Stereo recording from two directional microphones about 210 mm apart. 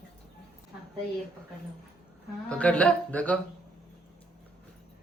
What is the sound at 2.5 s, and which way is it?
Speech, 5° left (ahead or behind).